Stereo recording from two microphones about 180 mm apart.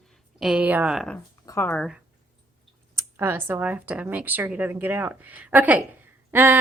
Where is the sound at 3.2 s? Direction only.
10° right (ahead or behind).